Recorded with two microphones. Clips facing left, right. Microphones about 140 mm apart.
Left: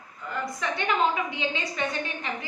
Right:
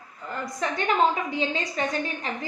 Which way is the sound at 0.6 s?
40° right (ahead or behind).